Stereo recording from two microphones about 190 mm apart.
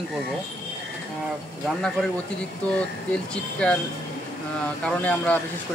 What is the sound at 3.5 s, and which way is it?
Speech, 5° left (ahead or behind).